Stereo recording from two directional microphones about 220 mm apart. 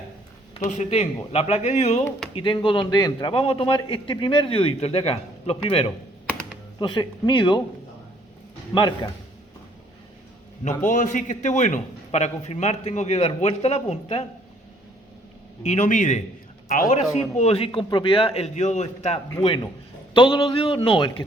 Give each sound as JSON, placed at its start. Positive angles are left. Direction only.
{"t": 0.7, "sound": "a man's voice", "side_deg": 30}
{"t": 6.2, "sound": "computer keyboard", "side_deg": 5}
{"t": 6.7, "sound": "a man's voice", "side_deg": 20}
{"t": 8.7, "sound": "a man's voice", "side_deg": 20}
{"t": 10.8, "sound": "a man's voice", "side_deg": 35}
{"t": 15.6, "sound": "a man's voice", "side_deg": 30}